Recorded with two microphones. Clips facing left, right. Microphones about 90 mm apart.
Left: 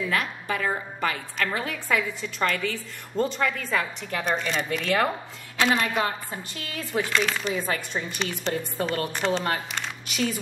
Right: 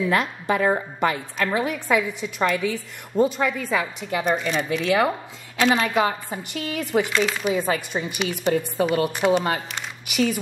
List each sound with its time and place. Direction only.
0.1 s a woman's voice: 25° right (ahead or behind)
7.2 s a woman's voice: 5° right (ahead or behind)
9.8 s a sound: 5° right (ahead or behind)